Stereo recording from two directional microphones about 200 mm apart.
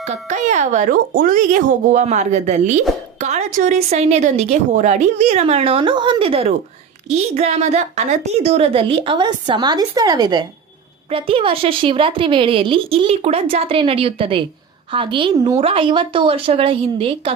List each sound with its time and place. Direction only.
0.0 s a woman's voice: 35° right (ahead or behind)